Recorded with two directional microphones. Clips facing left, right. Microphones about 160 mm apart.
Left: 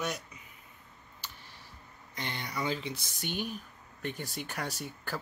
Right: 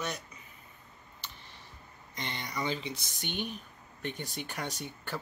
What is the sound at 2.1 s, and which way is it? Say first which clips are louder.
Speech: even; 5° left (ahead or behind).